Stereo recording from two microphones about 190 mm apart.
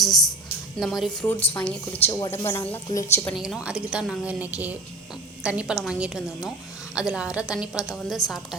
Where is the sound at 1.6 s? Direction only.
20° left (ahead or behind).